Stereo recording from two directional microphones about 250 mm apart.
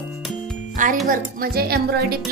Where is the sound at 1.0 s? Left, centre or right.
Right.